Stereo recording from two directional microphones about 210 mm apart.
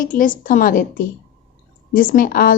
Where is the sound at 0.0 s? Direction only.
40° left (ahead or behind).